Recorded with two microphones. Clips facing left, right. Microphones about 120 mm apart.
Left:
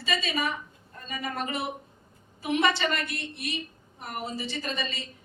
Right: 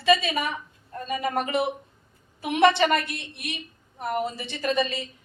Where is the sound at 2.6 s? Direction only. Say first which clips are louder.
Right 8 dB; 60° right (ahead or behind).